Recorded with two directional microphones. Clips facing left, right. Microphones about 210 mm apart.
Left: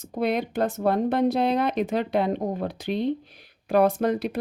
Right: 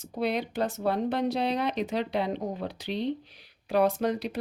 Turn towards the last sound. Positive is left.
turn(degrees=55)  # may be behind; listen again after turning